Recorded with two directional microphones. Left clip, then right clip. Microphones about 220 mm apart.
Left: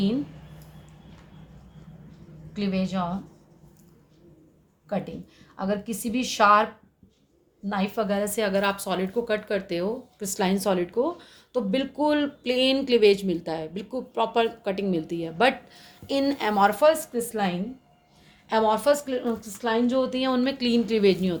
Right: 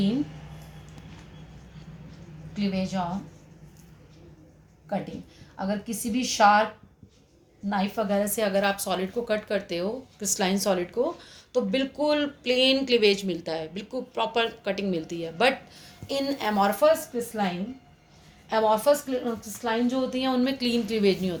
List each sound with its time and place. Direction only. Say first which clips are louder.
2.5 s speech: left 1 dB; 50° left (ahead or behind)
5.5 s speech: left 2 dB; 50° left (ahead or behind)
7.7 s speech: even; 50° left (ahead or behind)
18.4 s speech: even; 50° left (ahead or behind)